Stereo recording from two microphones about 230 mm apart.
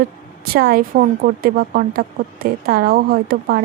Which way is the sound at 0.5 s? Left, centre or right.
Right.